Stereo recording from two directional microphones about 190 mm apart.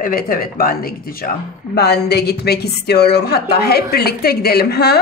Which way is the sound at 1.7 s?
60° left (ahead or behind).